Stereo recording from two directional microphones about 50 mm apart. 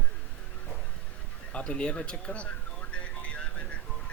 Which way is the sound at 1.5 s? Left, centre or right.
Left.